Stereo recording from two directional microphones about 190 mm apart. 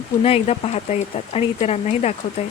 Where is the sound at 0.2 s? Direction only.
30° left (ahead or behind).